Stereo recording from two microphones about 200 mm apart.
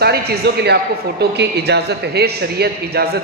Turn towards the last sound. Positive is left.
turn(degrees=-50)  # may be behind; listen again after turning